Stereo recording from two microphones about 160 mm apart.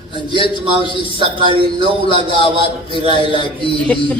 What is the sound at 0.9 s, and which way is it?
A man's voice, 30° right (ahead or behind).